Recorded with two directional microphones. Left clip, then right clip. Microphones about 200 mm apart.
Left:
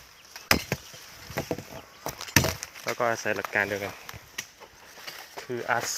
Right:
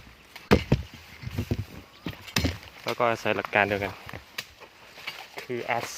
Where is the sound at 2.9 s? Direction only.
25° right (ahead or behind).